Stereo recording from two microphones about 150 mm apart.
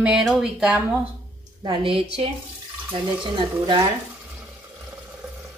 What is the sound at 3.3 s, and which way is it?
Speech, 30° right (ahead or behind).